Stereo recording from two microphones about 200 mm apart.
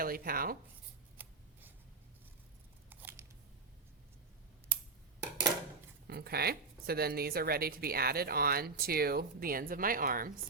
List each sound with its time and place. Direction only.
0.0 s speech: 45° right (ahead or behind)
1.1 s scissors: 10° right (ahead or behind)
2.9 s a sound: 10° right (ahead or behind)
6.1 s speech: 50° right (ahead or behind)